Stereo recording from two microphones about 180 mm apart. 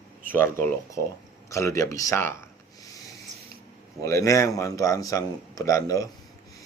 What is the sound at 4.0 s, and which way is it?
Speech, 15° left (ahead or behind).